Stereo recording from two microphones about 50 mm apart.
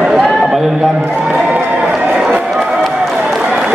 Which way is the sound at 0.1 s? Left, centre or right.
Centre.